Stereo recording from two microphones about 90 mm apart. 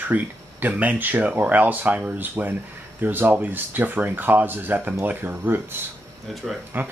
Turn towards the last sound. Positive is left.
turn(degrees=-20)  # may be behind; listen again after turning